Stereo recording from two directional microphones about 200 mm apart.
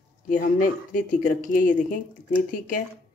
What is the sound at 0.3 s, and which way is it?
Speech, 40° left (ahead or behind).